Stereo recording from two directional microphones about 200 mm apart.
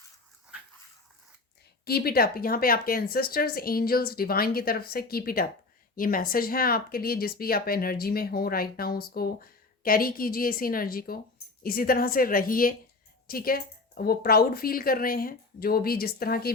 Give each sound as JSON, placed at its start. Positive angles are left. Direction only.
{"t": 1.8, "sound": "speech", "side_deg": 50}